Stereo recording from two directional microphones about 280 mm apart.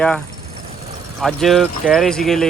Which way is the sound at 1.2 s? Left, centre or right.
Centre.